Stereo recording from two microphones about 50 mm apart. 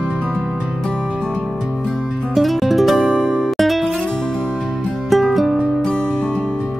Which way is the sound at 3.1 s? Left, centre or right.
Centre.